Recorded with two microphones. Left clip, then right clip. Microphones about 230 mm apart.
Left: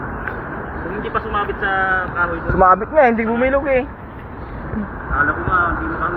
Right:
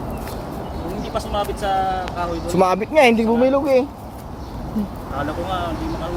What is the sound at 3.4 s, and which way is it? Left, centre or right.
Speech, right.